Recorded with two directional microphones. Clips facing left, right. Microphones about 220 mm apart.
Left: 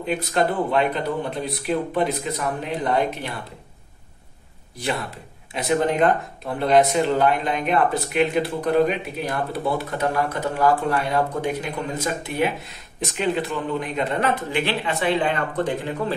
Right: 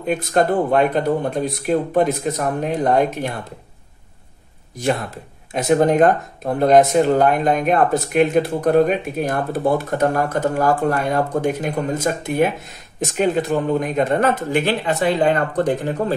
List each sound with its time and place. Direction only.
0.0 s speech: 45° right (ahead or behind)
4.7 s speech: 45° right (ahead or behind)